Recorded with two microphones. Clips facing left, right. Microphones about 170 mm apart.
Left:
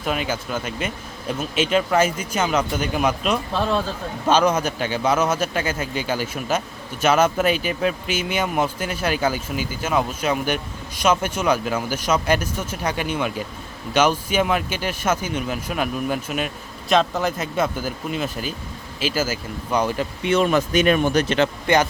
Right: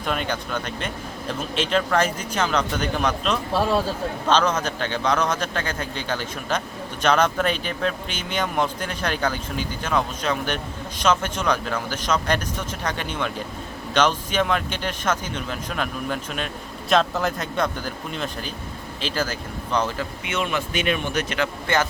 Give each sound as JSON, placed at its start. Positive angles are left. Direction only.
{"t": 0.0, "sound": "speech", "side_deg": 5}
{"t": 20.2, "sound": "speech", "side_deg": 35}